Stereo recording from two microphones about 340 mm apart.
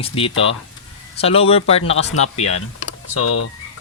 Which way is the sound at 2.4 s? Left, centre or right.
Left.